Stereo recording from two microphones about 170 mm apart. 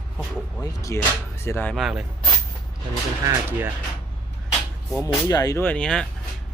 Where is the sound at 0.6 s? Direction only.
20° left (ahead or behind).